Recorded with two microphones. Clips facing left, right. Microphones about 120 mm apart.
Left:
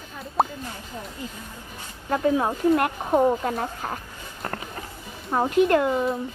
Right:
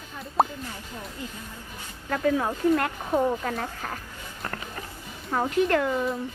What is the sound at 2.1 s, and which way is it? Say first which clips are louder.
A child's voice: left 3 dB; 25° left (ahead or behind).